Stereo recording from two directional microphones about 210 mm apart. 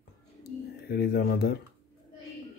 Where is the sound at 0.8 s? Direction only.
50° left (ahead or behind).